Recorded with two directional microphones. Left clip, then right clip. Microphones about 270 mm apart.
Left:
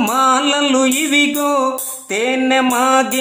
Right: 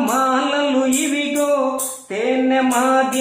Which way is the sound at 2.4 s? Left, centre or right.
Left.